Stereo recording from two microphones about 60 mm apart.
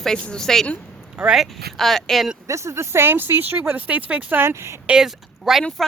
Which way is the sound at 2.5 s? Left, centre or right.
Right.